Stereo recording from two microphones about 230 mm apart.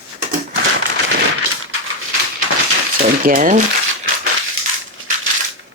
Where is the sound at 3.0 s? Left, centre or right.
Right.